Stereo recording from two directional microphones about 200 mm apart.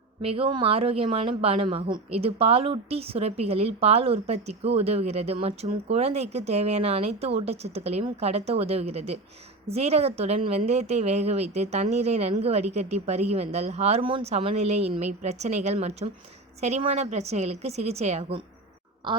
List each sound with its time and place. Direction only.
0.2 s speech: 30° right (ahead or behind)